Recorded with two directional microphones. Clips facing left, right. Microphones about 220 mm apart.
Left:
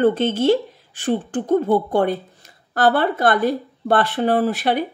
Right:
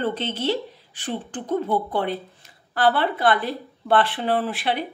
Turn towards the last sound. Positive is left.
turn(degrees=45)  # may be behind; listen again after turning